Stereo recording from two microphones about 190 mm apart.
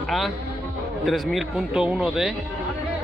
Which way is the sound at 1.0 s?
Centre (ahead or behind).